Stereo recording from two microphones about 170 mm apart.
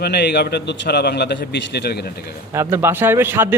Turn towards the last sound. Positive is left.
turn(degrees=-15)  # may be behind; listen again after turning